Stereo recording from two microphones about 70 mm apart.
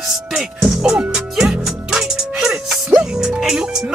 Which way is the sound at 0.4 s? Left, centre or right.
Centre.